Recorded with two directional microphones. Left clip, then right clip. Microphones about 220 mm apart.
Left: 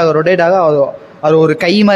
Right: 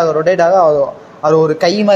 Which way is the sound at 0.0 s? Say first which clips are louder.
Left 1 dB; 35° left (ahead or behind).